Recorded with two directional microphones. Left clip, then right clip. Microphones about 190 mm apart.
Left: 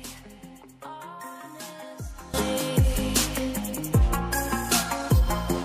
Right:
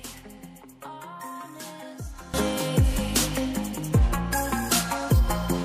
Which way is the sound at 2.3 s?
Centre (ahead or behind).